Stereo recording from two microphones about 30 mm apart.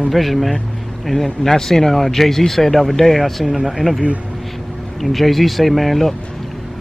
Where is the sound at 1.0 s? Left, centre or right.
Centre.